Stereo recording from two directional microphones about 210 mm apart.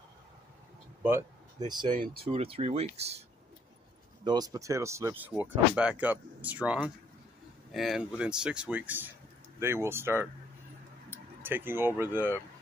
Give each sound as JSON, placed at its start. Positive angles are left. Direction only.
{"t": 1.9, "sound": "speech", "side_deg": -40}
{"t": 2.2, "sound": "speech", "side_deg": -25}
{"t": 4.2, "sound": "speech", "side_deg": -20}